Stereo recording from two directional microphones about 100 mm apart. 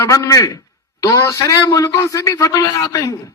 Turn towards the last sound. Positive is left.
turn(degrees=35)  # may be behind; listen again after turning